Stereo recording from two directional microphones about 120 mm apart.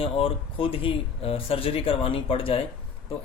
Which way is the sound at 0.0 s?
50° left (ahead or behind).